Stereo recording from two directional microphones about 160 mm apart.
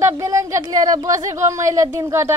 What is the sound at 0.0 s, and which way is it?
Speech, 20° right (ahead or behind).